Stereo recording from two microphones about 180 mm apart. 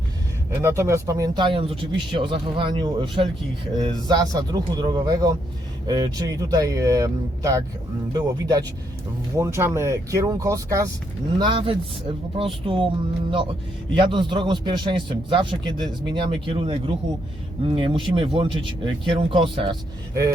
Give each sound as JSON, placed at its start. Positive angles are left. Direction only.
{"t": 0.6, "sound": "a man's voice", "side_deg": -15}